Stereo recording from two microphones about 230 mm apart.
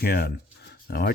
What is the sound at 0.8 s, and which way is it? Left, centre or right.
Speech, left.